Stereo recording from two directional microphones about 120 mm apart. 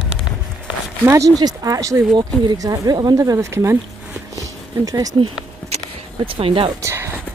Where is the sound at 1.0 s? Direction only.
25° right (ahead or behind).